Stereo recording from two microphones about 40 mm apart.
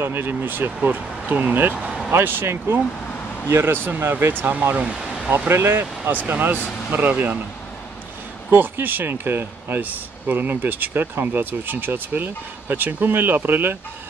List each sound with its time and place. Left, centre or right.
0.0 s speech: right
1.8 s vehicle: centre
2.1 s speech: right
4.3 s speech: right
4.9 s a sound: centre
5.5 s speech: right
8.5 s speech: right
9.8 s speech: right